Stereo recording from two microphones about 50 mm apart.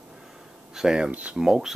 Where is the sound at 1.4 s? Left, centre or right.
Centre.